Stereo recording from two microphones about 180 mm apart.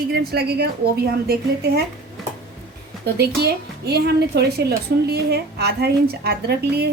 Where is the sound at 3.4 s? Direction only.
65° right (ahead or behind).